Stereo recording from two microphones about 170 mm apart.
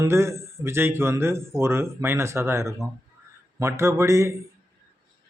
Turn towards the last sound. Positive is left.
turn(degrees=-15)  # may be behind; listen again after turning